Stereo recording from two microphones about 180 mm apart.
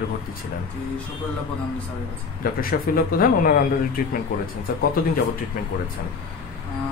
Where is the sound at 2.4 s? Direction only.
55° left (ahead or behind).